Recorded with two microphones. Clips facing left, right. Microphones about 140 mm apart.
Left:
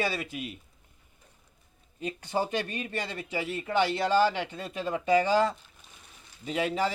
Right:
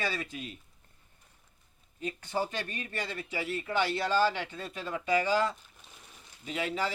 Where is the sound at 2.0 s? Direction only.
15° left (ahead or behind).